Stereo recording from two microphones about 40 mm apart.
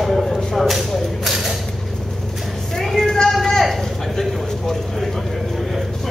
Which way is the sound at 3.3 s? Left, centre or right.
Centre.